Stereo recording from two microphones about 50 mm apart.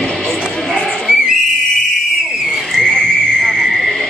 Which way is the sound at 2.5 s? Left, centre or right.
Centre.